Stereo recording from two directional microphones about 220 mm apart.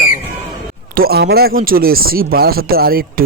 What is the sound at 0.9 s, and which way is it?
Speech, 45° right (ahead or behind).